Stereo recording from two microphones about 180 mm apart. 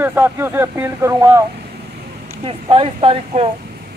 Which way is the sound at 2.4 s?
30° right (ahead or behind).